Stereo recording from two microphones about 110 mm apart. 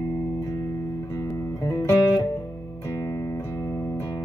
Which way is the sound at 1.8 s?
25° left (ahead or behind).